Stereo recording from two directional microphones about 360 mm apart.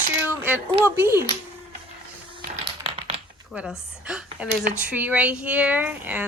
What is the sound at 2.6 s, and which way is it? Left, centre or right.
Typing, centre.